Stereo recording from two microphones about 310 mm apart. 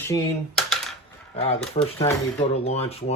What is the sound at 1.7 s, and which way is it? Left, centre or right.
Speech, centre.